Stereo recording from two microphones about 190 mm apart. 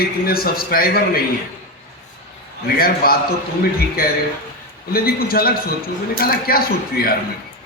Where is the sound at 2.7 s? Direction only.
50° left (ahead or behind).